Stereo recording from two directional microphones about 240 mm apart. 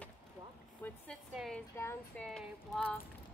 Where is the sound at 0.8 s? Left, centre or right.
Centre.